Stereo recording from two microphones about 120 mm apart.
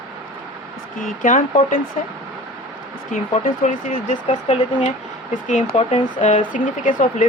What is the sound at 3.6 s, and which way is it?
Speech, 90° left.